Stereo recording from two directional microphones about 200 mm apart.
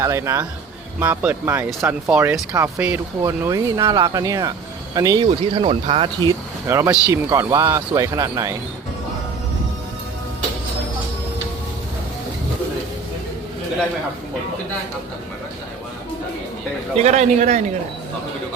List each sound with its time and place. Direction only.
0.0 s speech: 15° right (ahead or behind)
17.0 s a man's voice: 35° right (ahead or behind)